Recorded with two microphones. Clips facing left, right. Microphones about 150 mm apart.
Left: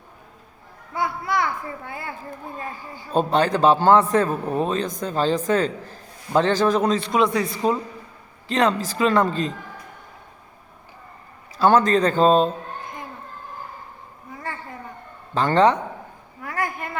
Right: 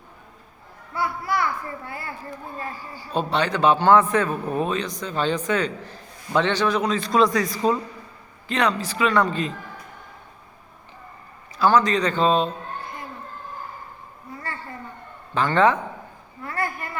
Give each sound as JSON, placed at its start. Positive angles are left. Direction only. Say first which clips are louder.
{"t": 0.9, "sound": "speech", "louder": "left 1 dB", "side_deg": 20}
{"t": 3.1, "sound": "a man's voice", "louder": "left 4 dB", "side_deg": 45}
{"t": 7.1, "sound": "a man's voice", "louder": "right 1 dB", "side_deg": 25}
{"t": 11.7, "sound": "speech", "louder": "left 3 dB", "side_deg": 50}
{"t": 15.4, "sound": "a man's voice", "louder": "left 2 dB", "side_deg": 35}
{"t": 16.4, "sound": "a sound", "louder": "left 1 dB", "side_deg": 15}